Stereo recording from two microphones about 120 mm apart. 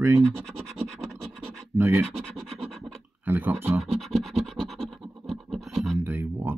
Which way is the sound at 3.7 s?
Centre (ahead or behind).